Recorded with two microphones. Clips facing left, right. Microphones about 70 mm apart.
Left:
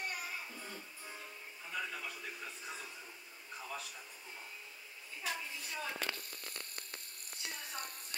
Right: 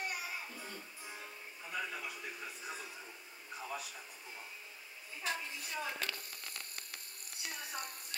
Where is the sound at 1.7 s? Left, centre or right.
Centre.